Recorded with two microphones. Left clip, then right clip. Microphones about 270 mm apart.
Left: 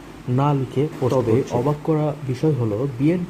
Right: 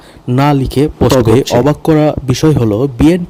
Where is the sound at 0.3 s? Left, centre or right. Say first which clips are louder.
Right 10 dB; right.